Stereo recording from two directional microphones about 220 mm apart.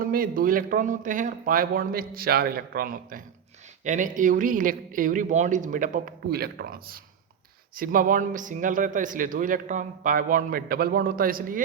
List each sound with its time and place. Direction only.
0.0 s a man's voice: 40° right (ahead or behind)